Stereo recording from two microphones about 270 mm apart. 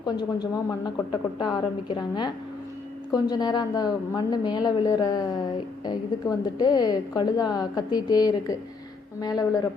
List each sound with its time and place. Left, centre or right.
0.0 s a woman's voice: centre